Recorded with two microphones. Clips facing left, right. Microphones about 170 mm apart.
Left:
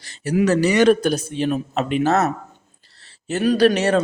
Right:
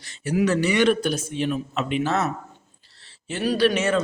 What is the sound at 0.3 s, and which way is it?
Speech, 40° left (ahead or behind).